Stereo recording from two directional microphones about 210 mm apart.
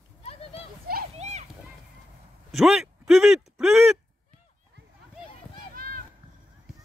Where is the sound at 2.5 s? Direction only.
Centre (ahead or behind).